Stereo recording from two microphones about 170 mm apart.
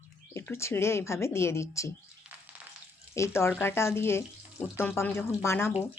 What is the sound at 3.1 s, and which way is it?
A woman's voice, 15° left (ahead or behind).